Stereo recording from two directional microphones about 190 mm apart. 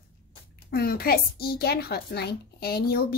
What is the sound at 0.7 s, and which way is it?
A woman's voice, 55° left (ahead or behind).